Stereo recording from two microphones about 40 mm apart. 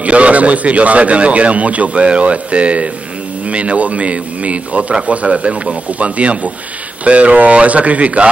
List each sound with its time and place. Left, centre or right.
0.0 s speech: right